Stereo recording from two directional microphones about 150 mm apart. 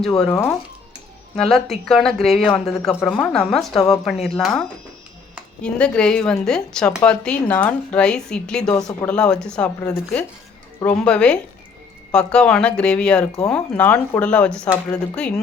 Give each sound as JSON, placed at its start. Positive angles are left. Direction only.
{"t": 0.2, "sound": "a woman's voice", "side_deg": 5}
{"t": 5.6, "sound": "a woman's voice", "side_deg": 5}
{"t": 8.7, "sound": "speech", "side_deg": 20}
{"t": 9.0, "sound": "a woman's voice", "side_deg": 5}